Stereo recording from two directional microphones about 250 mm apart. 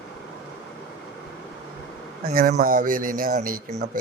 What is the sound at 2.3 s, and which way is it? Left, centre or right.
Speech, right.